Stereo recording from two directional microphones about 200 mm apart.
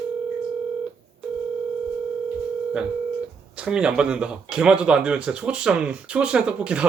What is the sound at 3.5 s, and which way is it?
Speech, 5° right (ahead or behind).